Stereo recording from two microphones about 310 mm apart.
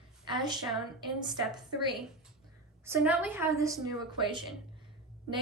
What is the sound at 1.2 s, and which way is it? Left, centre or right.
Speech, centre.